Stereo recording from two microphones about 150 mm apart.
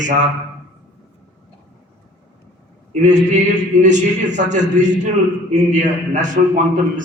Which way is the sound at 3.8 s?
55° right (ahead or behind).